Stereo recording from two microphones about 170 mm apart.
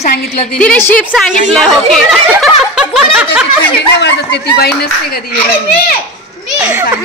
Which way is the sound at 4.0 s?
80° left.